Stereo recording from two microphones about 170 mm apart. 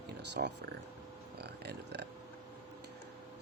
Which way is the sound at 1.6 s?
80° right.